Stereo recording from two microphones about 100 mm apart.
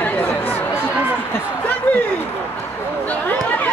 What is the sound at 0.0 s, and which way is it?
Chatter, 20° left (ahead or behind).